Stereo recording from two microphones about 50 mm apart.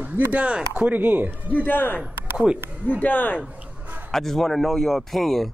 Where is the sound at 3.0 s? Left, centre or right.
Left.